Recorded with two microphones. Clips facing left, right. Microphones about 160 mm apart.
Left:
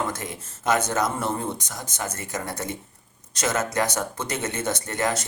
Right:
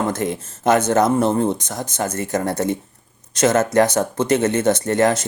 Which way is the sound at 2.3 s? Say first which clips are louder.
Right 12 dB; 45° right (ahead or behind).